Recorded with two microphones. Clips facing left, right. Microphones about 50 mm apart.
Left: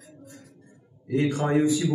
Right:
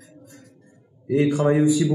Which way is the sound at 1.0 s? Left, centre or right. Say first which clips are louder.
Right 5 dB; centre.